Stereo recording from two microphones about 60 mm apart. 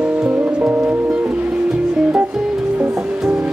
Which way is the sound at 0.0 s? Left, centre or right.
Centre.